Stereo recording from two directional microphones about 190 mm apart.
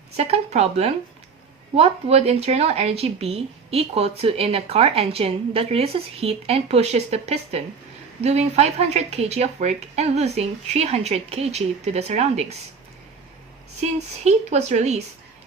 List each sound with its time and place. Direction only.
0.2 s speech: 35° right (ahead or behind)
13.8 s speech: 35° right (ahead or behind)